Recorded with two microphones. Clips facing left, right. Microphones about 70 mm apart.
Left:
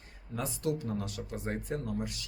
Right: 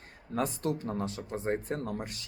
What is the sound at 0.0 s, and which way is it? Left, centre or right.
Speech, right.